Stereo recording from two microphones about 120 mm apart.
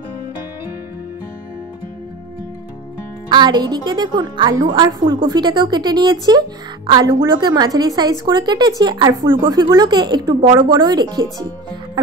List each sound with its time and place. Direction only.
3.3 s speech: 40° right (ahead or behind)